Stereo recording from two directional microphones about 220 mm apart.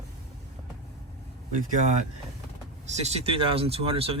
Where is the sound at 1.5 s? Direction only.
35° right (ahead or behind).